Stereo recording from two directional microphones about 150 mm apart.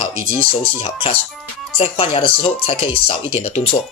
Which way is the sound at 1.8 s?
40° left (ahead or behind).